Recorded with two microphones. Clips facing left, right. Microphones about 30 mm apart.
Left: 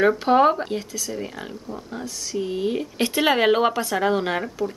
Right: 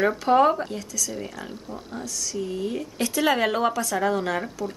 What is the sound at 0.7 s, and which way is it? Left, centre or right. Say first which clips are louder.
Speech: left 3 dB; left.